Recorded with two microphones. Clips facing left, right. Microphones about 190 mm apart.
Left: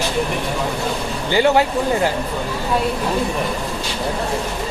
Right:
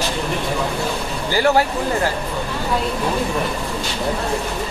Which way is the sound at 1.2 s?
20° left (ahead or behind).